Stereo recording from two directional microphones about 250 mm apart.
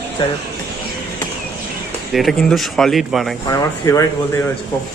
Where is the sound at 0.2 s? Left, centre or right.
Centre.